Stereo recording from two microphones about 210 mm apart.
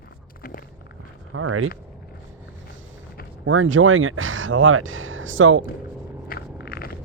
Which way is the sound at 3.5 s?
70° right (ahead or behind).